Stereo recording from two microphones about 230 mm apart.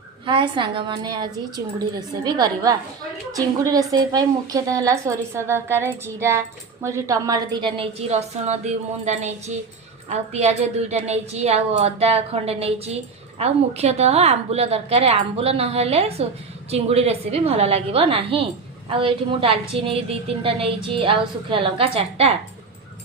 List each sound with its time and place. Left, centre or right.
0.3 s a woman's voice: right